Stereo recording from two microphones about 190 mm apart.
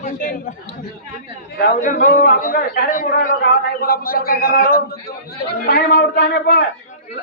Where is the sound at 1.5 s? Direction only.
45° left (ahead or behind).